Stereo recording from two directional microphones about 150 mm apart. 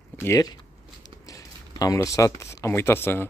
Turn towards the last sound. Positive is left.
turn(degrees=15)  # may be behind; listen again after turning